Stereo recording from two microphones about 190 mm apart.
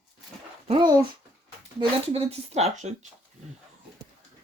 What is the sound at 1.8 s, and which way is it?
Speech, 30° right (ahead or behind).